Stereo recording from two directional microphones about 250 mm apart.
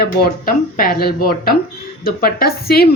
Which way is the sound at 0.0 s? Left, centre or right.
Left.